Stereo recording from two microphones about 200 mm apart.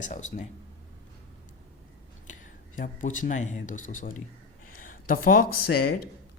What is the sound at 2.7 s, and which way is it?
Speech, 40° left (ahead or behind).